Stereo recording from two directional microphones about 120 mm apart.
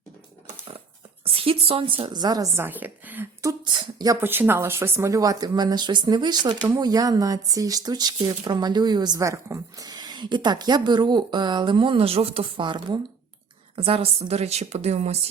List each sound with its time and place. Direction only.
1.2 s a woman's voice: 50° right (ahead or behind); by 2.5 s 35° right (ahead or behind)
2.6 s a woman's voice: 15° right (ahead or behind)
3.6 s speech: 40° right (ahead or behind)
4.2 s speech: 20° right (ahead or behind); by 13.0 s 40° right (ahead or behind)
13.7 s a woman's voice: 55° right (ahead or behind)